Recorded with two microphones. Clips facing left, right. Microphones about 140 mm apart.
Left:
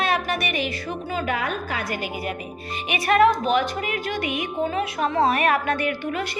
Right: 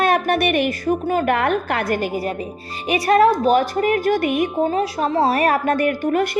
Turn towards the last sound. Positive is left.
turn(degrees=-50)  # may be behind; listen again after turning